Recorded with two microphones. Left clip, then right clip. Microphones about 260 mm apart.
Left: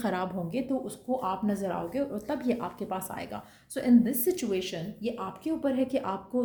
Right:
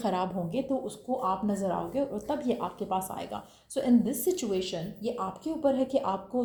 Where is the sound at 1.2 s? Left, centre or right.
Left.